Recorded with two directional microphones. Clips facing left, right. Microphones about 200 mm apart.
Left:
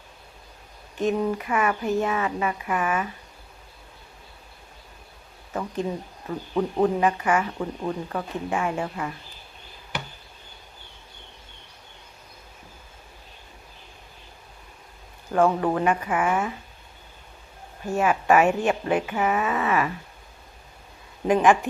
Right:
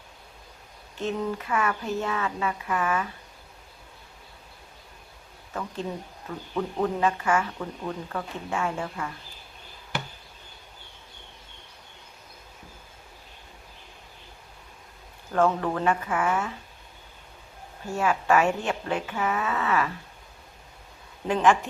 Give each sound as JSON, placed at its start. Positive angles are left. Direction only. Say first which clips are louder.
{"t": 0.9, "sound": "speech", "louder": "left 5 dB", "side_deg": 15}
{"t": 5.5, "sound": "speech", "louder": "left 4 dB", "side_deg": 15}
{"t": 15.3, "sound": "speech", "louder": "left 3 dB", "side_deg": 15}
{"t": 17.9, "sound": "speech", "louder": "left 3 dB", "side_deg": 15}
{"t": 21.2, "sound": "speech", "louder": "left 3 dB", "side_deg": 15}